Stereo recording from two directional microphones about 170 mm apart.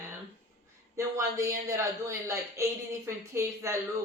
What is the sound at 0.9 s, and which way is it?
A man's voice, 15° right (ahead or behind).